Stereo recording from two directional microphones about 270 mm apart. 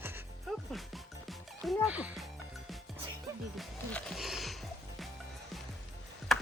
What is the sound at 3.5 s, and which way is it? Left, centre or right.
Music, centre.